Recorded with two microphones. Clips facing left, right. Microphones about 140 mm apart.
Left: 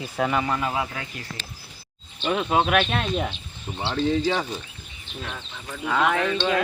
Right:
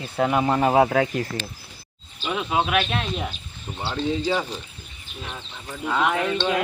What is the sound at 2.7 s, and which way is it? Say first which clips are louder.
Speech: left 1 dB; centre (ahead or behind).